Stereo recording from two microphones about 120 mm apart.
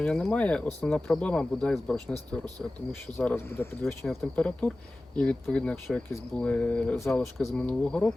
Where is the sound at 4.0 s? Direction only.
Centre (ahead or behind).